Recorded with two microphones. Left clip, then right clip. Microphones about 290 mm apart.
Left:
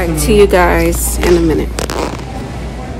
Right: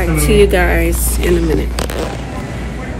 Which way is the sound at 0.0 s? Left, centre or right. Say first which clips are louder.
Left 2 dB; centre.